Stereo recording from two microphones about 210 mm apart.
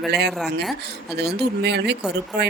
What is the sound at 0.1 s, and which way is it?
Speech, 50° right (ahead or behind).